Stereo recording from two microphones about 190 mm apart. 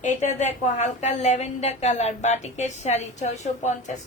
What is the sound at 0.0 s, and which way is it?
A woman's voice, 40° left (ahead or behind).